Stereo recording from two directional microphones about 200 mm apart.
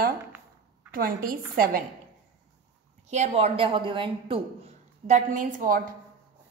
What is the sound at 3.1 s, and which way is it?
A woman's voice, 35° right (ahead or behind).